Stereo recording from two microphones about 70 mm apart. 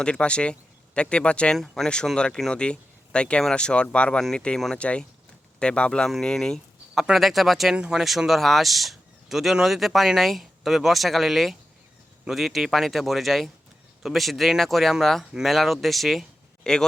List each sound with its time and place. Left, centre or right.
0.0 s speech: centre
1.5 s speech: centre
6.9 s speech: centre
7.8 s speech: centre
8.0 s speech: centre